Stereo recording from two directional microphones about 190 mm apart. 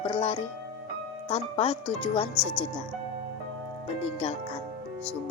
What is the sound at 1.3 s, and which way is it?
Speech, 30° left (ahead or behind).